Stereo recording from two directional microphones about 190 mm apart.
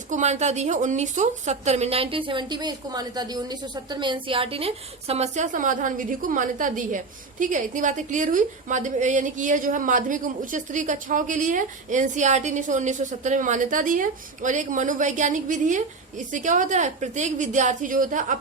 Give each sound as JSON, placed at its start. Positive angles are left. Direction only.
{"t": 0.1, "sound": "a woman's voice", "side_deg": -35}